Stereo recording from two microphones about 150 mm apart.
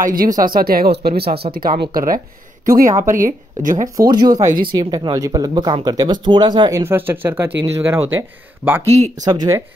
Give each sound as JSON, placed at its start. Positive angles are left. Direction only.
{"t": 0.0, "sound": "speech", "side_deg": -70}
{"t": 4.1, "sound": "speech", "side_deg": -25}
{"t": 6.8, "sound": "speech", "side_deg": -15}
{"t": 9.2, "sound": "speech", "side_deg": -25}